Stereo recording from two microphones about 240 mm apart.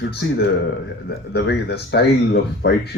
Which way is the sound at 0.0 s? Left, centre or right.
Left.